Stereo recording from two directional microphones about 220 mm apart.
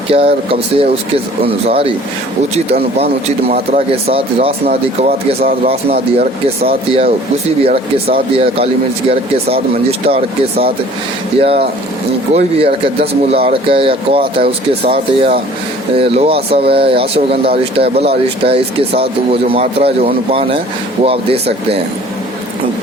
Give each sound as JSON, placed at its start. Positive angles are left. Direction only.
{"t": 0.1, "sound": "speech", "side_deg": -25}
{"t": 3.5, "sound": "speech", "side_deg": -30}